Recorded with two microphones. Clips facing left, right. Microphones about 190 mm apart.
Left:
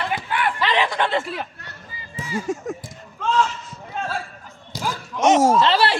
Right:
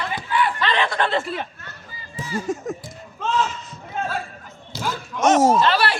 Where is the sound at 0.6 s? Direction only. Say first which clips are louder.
Left 1 dB; 15° left (ahead or behind).